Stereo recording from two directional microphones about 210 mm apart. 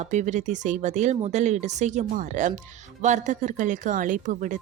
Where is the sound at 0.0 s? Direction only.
35° right (ahead or behind).